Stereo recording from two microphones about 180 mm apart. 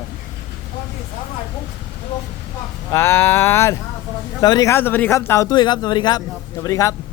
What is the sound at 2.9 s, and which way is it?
Speech, 15° left (ahead or behind).